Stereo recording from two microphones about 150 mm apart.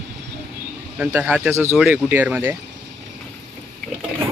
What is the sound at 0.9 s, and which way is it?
Speech, 10° right (ahead or behind).